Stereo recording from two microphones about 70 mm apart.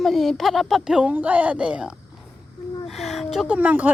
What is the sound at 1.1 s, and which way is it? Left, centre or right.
Speech, right.